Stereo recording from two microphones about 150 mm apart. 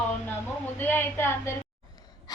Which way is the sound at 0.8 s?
15° left (ahead or behind).